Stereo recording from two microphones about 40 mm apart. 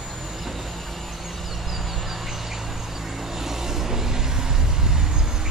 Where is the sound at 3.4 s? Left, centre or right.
Centre.